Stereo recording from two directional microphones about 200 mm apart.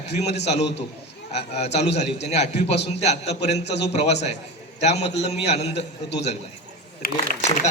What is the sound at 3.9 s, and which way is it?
A man's voice, 30° left (ahead or behind).